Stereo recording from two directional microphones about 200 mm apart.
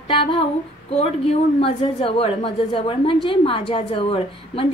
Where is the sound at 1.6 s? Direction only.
25° left (ahead or behind).